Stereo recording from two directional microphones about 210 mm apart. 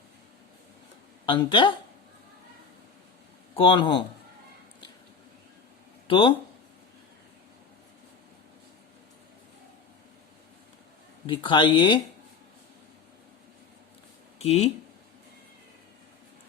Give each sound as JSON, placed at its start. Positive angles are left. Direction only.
{"t": 1.2, "sound": "speech", "side_deg": 20}
{"t": 3.5, "sound": "speech", "side_deg": 25}
{"t": 6.1, "sound": "speech", "side_deg": 25}
{"t": 11.3, "sound": "speech", "side_deg": 25}
{"t": 14.3, "sound": "speech", "side_deg": 30}